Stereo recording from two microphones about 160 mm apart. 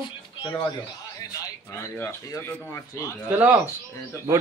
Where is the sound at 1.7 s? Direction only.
15° left (ahead or behind).